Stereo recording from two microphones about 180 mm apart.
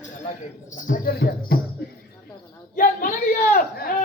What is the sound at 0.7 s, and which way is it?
Speech, 50° left (ahead or behind).